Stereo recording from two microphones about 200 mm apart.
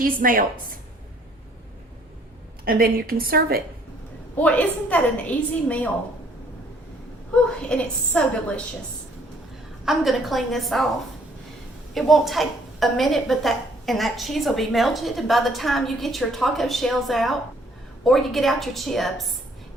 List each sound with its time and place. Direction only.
0.0 s a woman's voice: 45° right (ahead or behind)
2.6 s a woman's voice: 45° right (ahead or behind)
4.4 s a woman's voice: 5° left (ahead or behind)
7.6 s a woman's voice: 5° left (ahead or behind)
9.8 s a woman's voice: centre (ahead or behind)
11.9 s a woman's voice: centre (ahead or behind)